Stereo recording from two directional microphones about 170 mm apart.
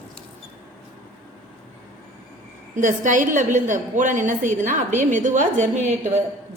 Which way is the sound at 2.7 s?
50° right (ahead or behind).